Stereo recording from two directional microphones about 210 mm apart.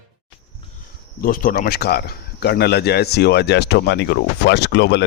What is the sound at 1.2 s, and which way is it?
Speech, 45° left (ahead or behind).